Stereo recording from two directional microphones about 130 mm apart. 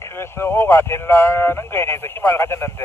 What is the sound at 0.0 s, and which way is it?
Speech, 20° left (ahead or behind).